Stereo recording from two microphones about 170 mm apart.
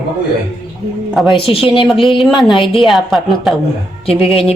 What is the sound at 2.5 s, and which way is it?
Speech, 30° left (ahead or behind).